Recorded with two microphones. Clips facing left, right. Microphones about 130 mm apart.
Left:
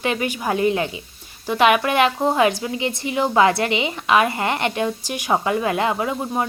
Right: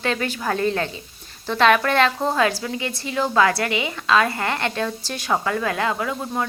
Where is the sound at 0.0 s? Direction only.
15° left (ahead or behind).